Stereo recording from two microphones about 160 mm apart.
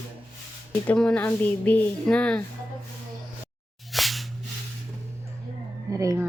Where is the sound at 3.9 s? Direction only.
Centre (ahead or behind).